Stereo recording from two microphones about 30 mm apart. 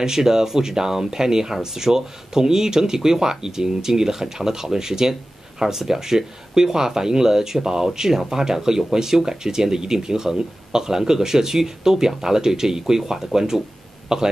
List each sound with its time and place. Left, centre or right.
0.0 s speech: centre